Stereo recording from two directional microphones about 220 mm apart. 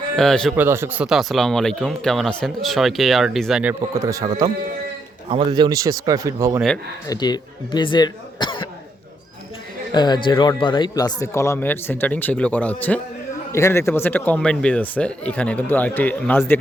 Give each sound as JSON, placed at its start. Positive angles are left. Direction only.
{"t": 0.2, "sound": "speech", "side_deg": 0}
{"t": 0.5, "sound": "speech", "side_deg": -10}
{"t": 7.1, "sound": "speech", "side_deg": 20}
{"t": 9.9, "sound": "speech", "side_deg": 20}